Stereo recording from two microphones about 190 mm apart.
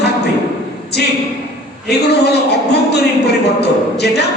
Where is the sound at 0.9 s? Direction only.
60° left (ahead or behind).